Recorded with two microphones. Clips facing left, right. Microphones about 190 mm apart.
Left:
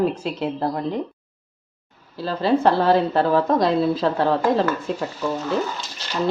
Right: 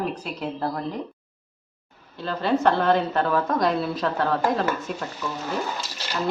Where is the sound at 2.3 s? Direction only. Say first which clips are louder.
Left 3 dB; 30° left (ahead or behind).